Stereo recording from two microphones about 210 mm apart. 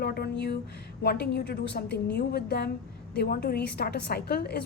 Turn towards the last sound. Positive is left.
turn(degrees=50)  # may be behind; listen again after turning